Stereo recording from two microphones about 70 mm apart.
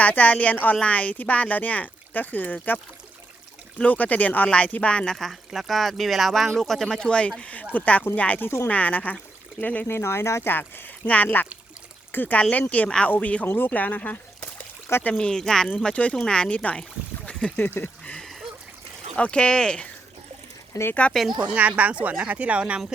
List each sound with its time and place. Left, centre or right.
0.0 s a woman's voice: left
5.1 s a woman's voice: centre; by 9.8 s left
9.8 s speech: left
10.5 s a woman's voice: left
15.2 s speech: centre; by 18.1 s left
19.1 s speech: centre
21.1 s speech: centre
21.4 s speech: centre